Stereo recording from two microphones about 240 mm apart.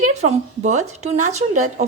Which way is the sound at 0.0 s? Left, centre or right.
Right.